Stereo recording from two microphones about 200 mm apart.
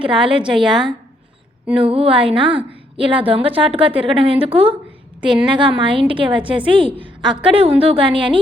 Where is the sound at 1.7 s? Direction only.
30° right (ahead or behind).